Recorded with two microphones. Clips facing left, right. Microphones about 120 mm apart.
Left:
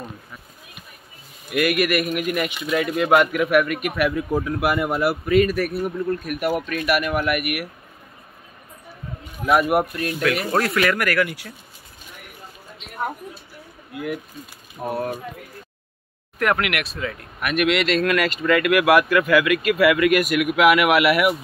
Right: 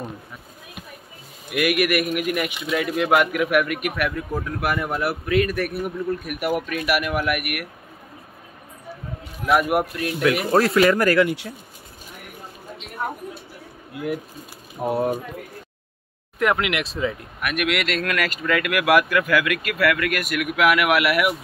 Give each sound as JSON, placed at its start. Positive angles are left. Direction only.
{"t": 1.5, "sound": "a man's voice", "side_deg": -5}
{"t": 3.9, "sound": "speech", "side_deg": 10}
{"t": 9.5, "sound": "speech", "side_deg": -5}
{"t": 10.2, "sound": "a man's voice", "side_deg": -15}
{"t": 14.8, "sound": "a man's voice", "side_deg": -15}
{"t": 16.3, "sound": "speech", "side_deg": -20}
{"t": 17.4, "sound": "speech", "side_deg": -5}
{"t": 19.8, "sound": "speech", "side_deg": 10}